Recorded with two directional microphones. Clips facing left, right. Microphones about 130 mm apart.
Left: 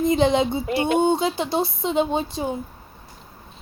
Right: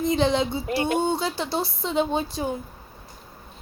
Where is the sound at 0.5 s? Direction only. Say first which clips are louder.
Left 3 dB; 20° left (ahead or behind).